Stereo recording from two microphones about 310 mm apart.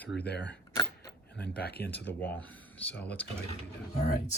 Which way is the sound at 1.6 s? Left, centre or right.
Left.